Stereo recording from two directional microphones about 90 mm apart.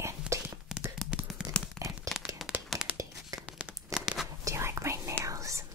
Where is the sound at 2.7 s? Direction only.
Centre (ahead or behind).